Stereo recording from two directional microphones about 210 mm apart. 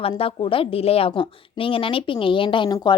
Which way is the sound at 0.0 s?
25° left (ahead or behind).